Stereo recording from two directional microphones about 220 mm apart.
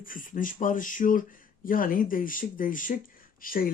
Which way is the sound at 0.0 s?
40° left (ahead or behind).